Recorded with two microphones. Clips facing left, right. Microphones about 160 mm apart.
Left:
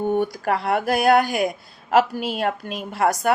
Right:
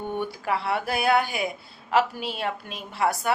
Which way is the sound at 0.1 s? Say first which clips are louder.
Left 6 dB; 45° left (ahead or behind).